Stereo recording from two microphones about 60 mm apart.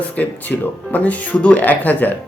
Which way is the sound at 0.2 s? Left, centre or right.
Left.